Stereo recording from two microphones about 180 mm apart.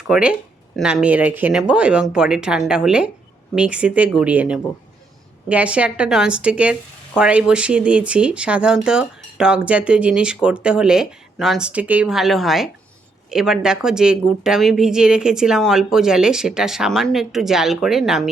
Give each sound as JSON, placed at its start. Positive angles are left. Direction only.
{"t": 0.1, "sound": "a woman's voice", "side_deg": -5}